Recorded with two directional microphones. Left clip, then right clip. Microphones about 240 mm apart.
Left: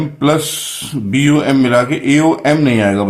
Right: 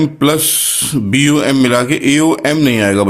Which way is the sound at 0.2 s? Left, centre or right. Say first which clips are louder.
Left 4 dB; right.